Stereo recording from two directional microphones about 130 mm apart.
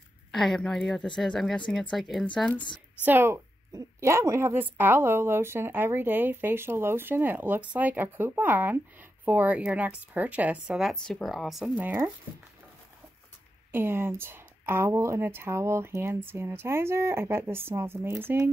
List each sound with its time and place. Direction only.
0.3 s a woman's voice: centre (ahead or behind)
3.1 s speech: 20° right (ahead or behind)
13.7 s speech: 15° right (ahead or behind)